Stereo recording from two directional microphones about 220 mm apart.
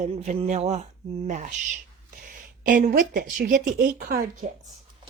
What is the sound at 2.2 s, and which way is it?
Speech, 40° right (ahead or behind).